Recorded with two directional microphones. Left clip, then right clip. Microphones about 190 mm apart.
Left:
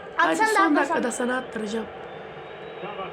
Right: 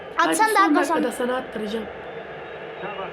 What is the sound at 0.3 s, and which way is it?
Speech, 55° right (ahead or behind).